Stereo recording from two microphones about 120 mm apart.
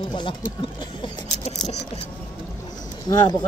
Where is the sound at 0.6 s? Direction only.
50° left (ahead or behind).